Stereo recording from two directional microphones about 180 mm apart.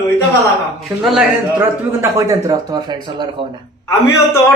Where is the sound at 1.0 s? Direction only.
Centre (ahead or behind).